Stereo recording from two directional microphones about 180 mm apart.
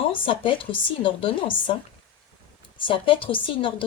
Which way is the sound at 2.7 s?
30° left (ahead or behind).